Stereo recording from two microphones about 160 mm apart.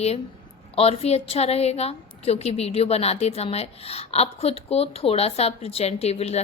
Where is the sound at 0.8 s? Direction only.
40° left (ahead or behind).